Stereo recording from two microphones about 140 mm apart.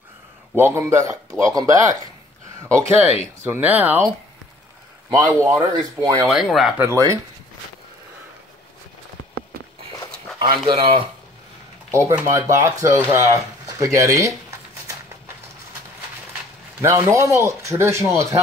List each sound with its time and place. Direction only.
0.6 s speech: 20° right (ahead or behind)
5.4 s speech: 30° right (ahead or behind)
6.2 s speech: centre (ahead or behind)
6.8 s speech: 20° right (ahead or behind)
10.4 s speech: 35° right (ahead or behind)
11.9 s speech: 20° right (ahead or behind)
16.8 s speech: 20° right (ahead or behind)